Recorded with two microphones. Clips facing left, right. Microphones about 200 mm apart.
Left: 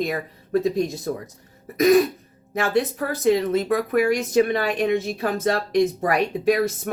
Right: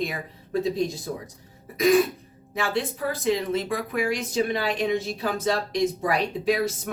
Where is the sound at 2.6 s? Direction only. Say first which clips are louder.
Left 5 dB; 45° left (ahead or behind).